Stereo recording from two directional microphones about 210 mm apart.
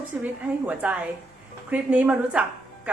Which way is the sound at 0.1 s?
5° right (ahead or behind).